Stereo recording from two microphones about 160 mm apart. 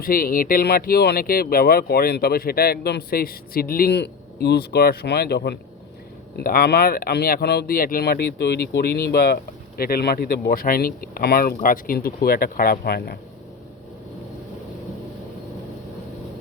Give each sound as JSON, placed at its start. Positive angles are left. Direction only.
{"t": 0.0, "sound": "speech", "side_deg": 65}
{"t": 6.3, "sound": "speech", "side_deg": 70}